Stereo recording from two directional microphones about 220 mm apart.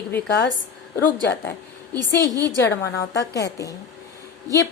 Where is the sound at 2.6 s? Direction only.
15° left (ahead or behind).